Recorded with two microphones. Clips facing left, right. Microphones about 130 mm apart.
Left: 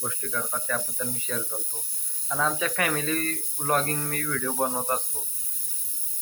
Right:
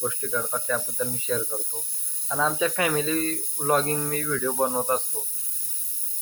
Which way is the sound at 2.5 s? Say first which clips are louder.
Right 4 dB; 20° right (ahead or behind).